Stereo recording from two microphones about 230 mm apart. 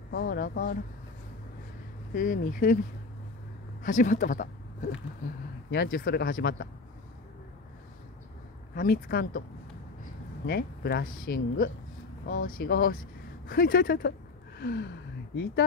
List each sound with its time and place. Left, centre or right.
0.1 s speech: left
2.1 s speech: left
3.8 s speech: left
5.7 s speech: left
8.7 s speech: left
10.4 s speech: left
14.6 s gasp: left